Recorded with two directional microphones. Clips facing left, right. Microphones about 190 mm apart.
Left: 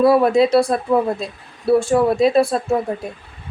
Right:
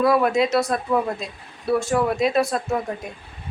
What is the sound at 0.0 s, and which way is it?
Speech, 30° left (ahead or behind).